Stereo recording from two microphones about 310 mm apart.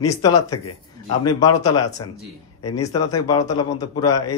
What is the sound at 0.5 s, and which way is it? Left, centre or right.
A man's voice, left.